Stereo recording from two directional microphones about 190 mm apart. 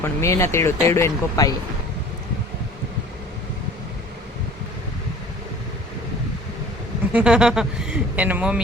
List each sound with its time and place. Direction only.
0.0 s speech: 15° left (ahead or behind)
7.1 s speech: 5° right (ahead or behind)